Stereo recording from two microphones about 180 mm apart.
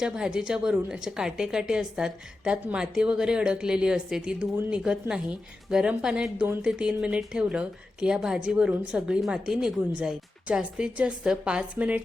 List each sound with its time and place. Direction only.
0.0 s a woman's voice: 5° right (ahead or behind)